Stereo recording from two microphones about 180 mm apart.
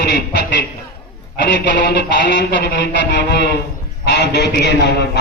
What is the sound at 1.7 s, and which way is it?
A man's voice, 70° left (ahead or behind).